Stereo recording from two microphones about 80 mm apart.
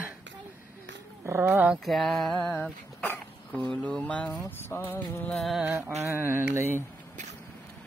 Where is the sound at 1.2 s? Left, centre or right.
Right.